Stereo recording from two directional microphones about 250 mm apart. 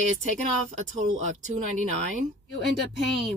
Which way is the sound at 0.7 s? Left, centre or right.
Right.